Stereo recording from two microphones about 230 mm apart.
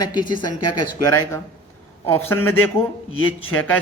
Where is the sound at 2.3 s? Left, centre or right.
Centre.